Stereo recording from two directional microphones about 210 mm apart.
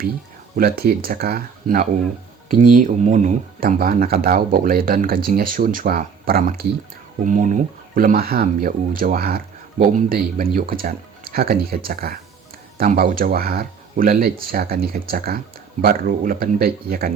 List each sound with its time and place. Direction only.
0.5 s speech: 45° right (ahead or behind)